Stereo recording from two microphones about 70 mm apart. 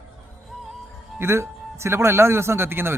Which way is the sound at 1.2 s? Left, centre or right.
Right.